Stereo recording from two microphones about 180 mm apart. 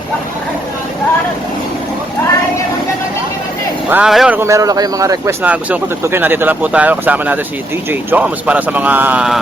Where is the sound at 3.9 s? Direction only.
5° right (ahead or behind).